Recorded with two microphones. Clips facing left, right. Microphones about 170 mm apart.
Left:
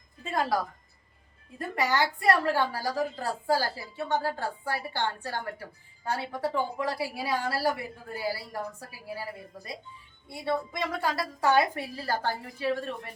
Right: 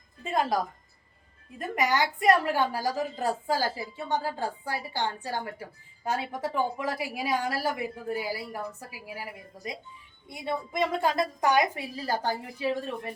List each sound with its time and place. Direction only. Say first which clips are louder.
0.3 s a woman's voice: right 1 dB; 20° right (ahead or behind)